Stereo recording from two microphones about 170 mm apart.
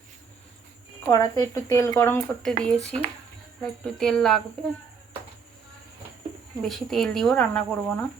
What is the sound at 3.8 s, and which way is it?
Speech, 5° left (ahead or behind).